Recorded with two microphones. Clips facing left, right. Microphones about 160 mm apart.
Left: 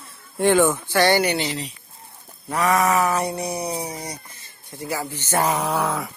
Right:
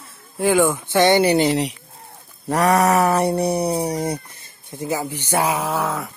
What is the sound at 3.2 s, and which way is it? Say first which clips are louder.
Music: right 7 dB; 30° right (ahead or behind).